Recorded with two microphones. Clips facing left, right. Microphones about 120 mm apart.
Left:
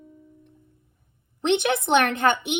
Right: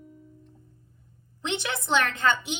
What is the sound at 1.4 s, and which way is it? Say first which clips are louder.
A woman's voice: left 9 dB; 60° left (ahead or behind).